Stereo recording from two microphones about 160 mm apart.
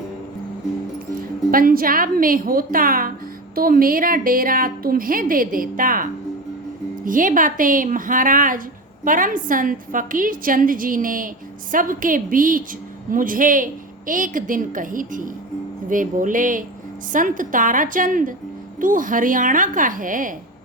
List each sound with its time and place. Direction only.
1.2 s a woman's voice: 60° right (ahead or behind)